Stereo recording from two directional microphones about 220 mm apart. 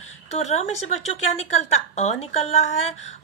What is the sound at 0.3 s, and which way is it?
A woman's voice, 30° left (ahead or behind).